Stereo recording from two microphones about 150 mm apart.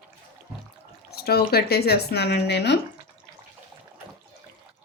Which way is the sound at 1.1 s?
90° left.